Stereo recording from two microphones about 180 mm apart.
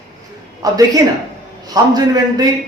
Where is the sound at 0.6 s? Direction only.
20° right (ahead or behind).